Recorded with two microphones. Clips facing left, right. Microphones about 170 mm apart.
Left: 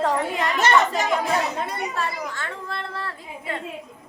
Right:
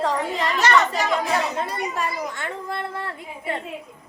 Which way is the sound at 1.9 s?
15° right (ahead or behind).